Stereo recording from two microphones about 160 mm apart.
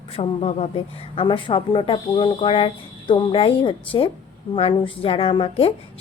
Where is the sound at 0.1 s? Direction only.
40° left (ahead or behind).